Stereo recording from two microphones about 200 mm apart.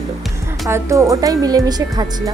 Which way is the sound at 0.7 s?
15° right (ahead or behind).